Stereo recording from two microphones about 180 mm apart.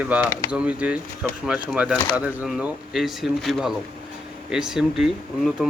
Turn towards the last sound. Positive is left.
turn(degrees=0)  # may be behind; listen again after turning